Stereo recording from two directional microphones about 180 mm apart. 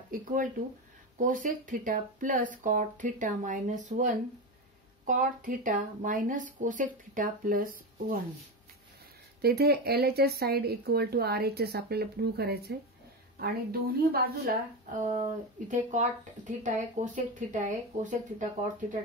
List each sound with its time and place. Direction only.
0.1 s speech: 50° right (ahead or behind)
9.4 s speech: 60° right (ahead or behind); by 18.5 s 45° right (ahead or behind)